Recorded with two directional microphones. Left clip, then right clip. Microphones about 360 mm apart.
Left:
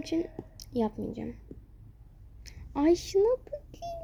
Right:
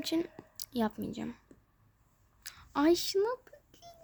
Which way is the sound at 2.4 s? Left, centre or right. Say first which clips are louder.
Left 1 dB; right.